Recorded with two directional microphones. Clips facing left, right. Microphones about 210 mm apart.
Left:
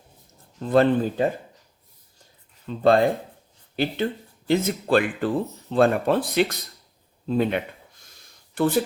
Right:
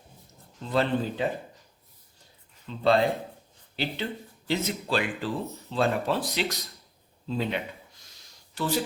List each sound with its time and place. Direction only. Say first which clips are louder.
0.6 s speech: left 7 dB; 50° left (ahead or behind)
2.6 s speech: left 5 dB; 50° left (ahead or behind)